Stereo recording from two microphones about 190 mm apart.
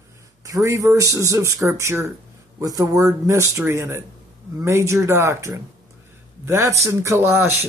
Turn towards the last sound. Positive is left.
turn(degrees=-15)  # may be behind; listen again after turning